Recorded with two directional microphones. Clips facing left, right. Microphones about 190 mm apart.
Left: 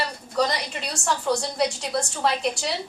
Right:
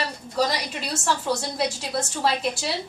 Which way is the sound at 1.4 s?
5° right (ahead or behind).